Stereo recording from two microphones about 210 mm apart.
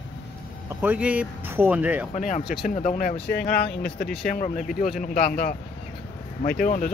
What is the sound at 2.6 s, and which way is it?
Speech, 35° left (ahead or behind).